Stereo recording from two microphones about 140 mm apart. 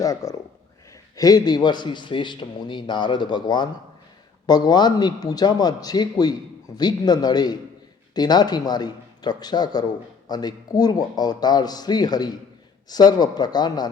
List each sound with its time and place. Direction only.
0.0 s a man's voice: 25° left (ahead or behind)